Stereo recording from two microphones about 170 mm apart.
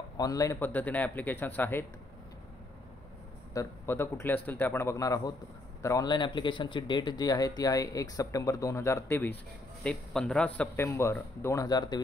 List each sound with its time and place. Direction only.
0.2 s a man's voice: 20° left (ahead or behind)
3.5 s a man's voice: 15° left (ahead or behind)